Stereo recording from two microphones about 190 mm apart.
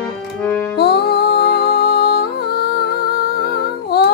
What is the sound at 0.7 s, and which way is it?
Music, 55° left (ahead or behind).